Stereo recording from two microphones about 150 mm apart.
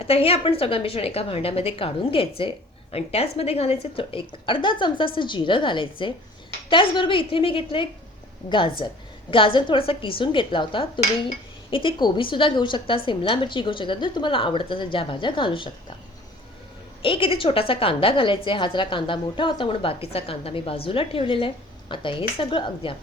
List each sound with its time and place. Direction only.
0.0 s a woman's voice: 40° left (ahead or behind)
17.0 s a woman's voice: 35° left (ahead or behind)